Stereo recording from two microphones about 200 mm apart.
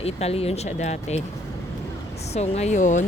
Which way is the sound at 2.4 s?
35° left (ahead or behind).